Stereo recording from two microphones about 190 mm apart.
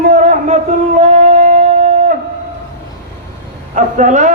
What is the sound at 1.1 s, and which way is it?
Shofar, 40° right (ahead or behind).